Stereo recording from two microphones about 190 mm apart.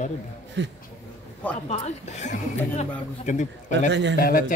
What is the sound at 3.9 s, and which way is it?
Speech, 65° right (ahead or behind).